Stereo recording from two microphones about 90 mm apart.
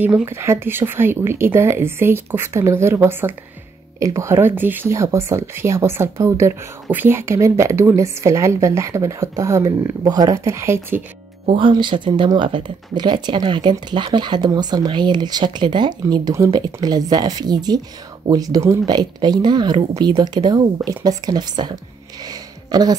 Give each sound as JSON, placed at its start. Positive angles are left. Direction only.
{"t": 0.2, "sound": "speech", "side_deg": -30}
{"t": 4.0, "sound": "speech", "side_deg": -35}
{"t": 4.9, "sound": "a woman's voice", "side_deg": -35}
{"t": 9.7, "sound": "a woman's voice", "side_deg": -45}
{"t": 11.5, "sound": "speech", "side_deg": -65}
{"t": 22.3, "sound": "a sound", "side_deg": -50}